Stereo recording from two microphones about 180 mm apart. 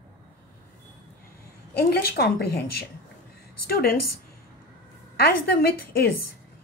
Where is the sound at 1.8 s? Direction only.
60° left (ahead or behind).